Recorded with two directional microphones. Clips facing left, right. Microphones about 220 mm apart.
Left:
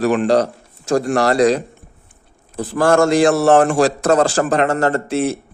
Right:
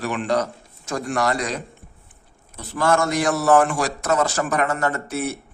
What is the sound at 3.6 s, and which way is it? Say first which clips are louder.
Speech: left 8 dB; 30° left (ahead or behind).